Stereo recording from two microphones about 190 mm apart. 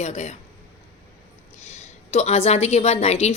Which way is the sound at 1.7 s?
35° left (ahead or behind).